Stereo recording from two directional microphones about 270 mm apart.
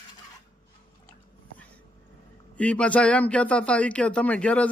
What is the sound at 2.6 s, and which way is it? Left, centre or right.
Speech, centre.